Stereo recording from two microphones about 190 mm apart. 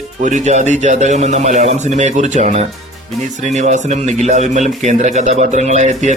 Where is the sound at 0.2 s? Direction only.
40° right (ahead or behind).